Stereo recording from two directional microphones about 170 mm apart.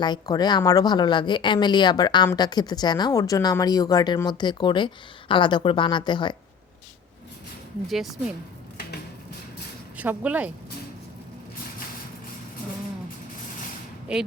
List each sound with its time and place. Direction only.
0.0 s a woman's voice: 25° left (ahead or behind)
7.9 s speech: centre (ahead or behind)
10.0 s speech: 10° right (ahead or behind)